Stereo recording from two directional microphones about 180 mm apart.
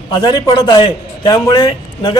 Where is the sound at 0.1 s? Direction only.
25° left (ahead or behind).